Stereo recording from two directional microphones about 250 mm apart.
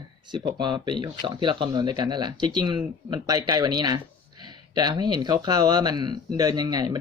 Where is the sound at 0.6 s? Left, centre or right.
Centre.